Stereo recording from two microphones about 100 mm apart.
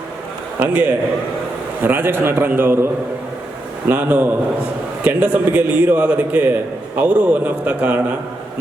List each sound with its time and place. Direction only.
0.6 s a man's voice: 15° right (ahead or behind)
3.8 s a man's voice: 15° right (ahead or behind)